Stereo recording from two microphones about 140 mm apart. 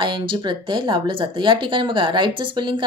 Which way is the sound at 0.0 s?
35° right (ahead or behind).